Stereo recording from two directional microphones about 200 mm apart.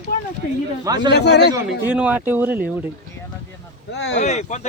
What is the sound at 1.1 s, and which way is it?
Speech, 55° left (ahead or behind).